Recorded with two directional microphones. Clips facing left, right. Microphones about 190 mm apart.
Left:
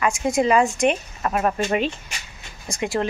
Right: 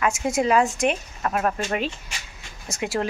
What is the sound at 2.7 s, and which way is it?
Speech, 5° right (ahead or behind).